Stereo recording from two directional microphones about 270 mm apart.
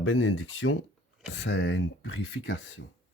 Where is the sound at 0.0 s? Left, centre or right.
Left.